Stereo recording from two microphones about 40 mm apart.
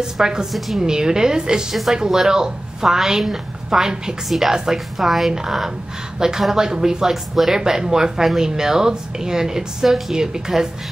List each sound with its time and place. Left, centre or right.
0.0 s a woman's voice: centre
1.7 s a woman's voice: centre